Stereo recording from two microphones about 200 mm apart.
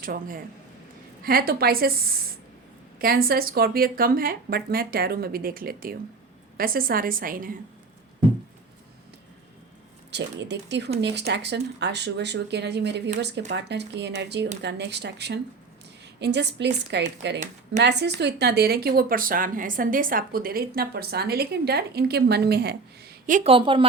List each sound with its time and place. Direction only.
0.0 s speech: 45° right (ahead or behind)
10.1 s speech: 60° right (ahead or behind); by 23.5 s 40° right (ahead or behind)
23.5 s speech: 25° right (ahead or behind)